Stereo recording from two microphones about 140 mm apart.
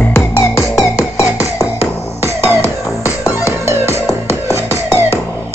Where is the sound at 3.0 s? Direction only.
25° left (ahead or behind).